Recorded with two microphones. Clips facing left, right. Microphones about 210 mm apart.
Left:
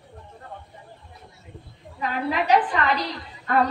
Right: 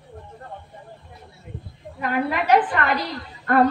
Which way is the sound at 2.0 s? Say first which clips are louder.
Right 2 dB; 60° right (ahead or behind).